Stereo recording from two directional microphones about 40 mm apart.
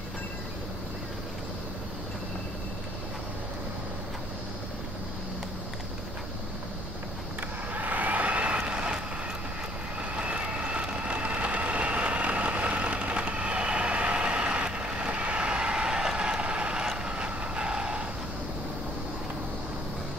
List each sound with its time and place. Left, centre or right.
7.7 s vehicle: right
10.1 s vehicle: right
16.8 s vehicle: centre
17.1 s vehicle: right